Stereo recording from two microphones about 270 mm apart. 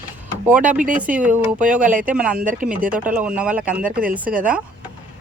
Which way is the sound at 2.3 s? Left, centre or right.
Right.